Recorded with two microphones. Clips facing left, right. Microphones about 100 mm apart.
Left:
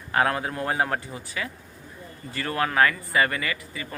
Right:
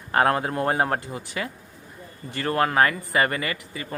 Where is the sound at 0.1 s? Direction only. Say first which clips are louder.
Right 3 dB; 40° right (ahead or behind).